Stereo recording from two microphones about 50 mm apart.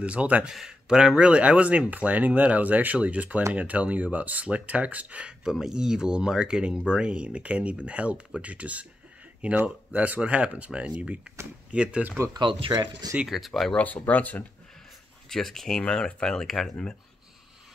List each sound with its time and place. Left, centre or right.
0.0 s speech: right
0.5 s speech: centre
5.4 s speech: centre
13.3 s speech: centre
13.7 s speech: left
15.2 s speech: centre
15.8 s speech: centre